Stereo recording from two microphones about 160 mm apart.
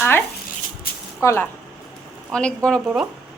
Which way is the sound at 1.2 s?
15° left (ahead or behind).